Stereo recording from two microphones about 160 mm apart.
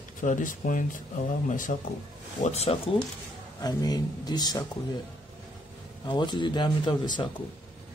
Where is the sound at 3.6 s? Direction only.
25° left (ahead or behind).